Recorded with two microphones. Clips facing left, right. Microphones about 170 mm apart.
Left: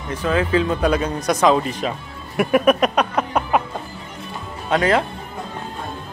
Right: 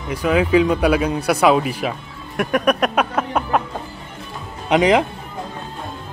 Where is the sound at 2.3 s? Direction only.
5° left (ahead or behind).